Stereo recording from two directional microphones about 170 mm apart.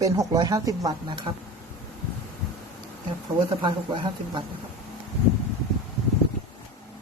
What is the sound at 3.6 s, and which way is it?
Speech, 30° right (ahead or behind).